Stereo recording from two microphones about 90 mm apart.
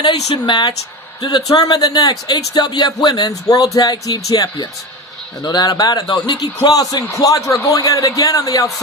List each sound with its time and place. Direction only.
0.0 s a man's voice: 55° left (ahead or behind); by 8.7 s 40° left (ahead or behind)